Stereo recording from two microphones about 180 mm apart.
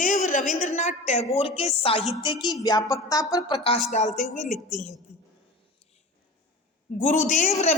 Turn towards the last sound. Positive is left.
turn(degrees=40)  # may be behind; listen again after turning